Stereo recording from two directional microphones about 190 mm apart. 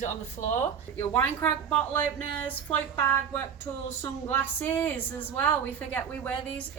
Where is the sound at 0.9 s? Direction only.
10° left (ahead or behind).